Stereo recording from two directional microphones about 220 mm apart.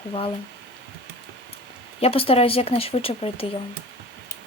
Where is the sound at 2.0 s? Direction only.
25° left (ahead or behind).